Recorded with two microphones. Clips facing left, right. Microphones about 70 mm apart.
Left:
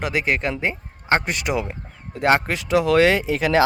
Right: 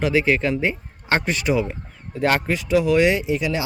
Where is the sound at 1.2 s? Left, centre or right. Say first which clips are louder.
Right 3 dB; left.